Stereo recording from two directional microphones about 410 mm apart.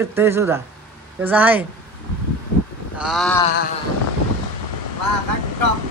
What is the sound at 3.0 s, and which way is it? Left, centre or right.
Speech, centre.